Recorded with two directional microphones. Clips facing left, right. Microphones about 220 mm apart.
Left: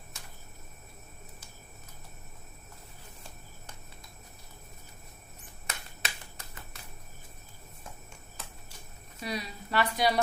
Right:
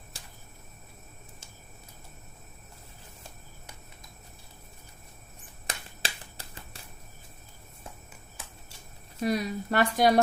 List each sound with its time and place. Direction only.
0.1 s a sound: 30° right (ahead or behind)
5.6 s finger snapping: 30° right (ahead or behind)
9.2 s speech: 50° right (ahead or behind)